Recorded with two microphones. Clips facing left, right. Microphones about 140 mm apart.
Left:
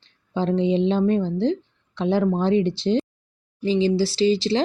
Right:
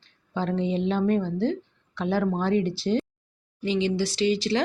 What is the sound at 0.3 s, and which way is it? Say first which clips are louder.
Speech: left 5 dB; 25° left (ahead or behind).